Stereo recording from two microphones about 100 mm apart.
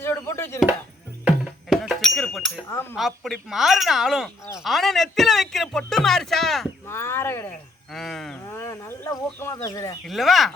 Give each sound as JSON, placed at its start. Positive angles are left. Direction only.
{"t": 0.0, "sound": "chop", "side_deg": 25}
{"t": 1.2, "sound": "music", "side_deg": -5}
{"t": 2.9, "sound": "speech", "side_deg": 0}
{"t": 6.8, "sound": "speech", "side_deg": 25}
{"t": 7.9, "sound": "speech", "side_deg": 5}
{"t": 8.4, "sound": "speech", "side_deg": 30}
{"t": 10.1, "sound": "speech", "side_deg": 0}